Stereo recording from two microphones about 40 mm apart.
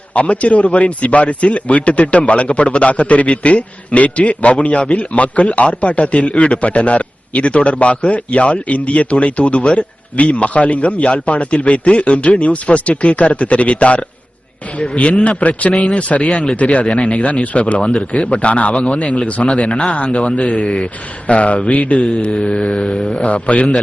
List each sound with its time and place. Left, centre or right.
0.1 s a man's voice: left